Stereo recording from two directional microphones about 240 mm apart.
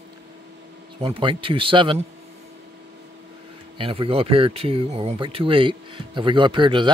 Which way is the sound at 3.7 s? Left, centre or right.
Right.